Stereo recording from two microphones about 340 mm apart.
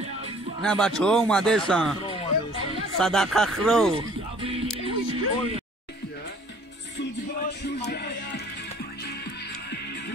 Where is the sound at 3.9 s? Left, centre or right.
Centre.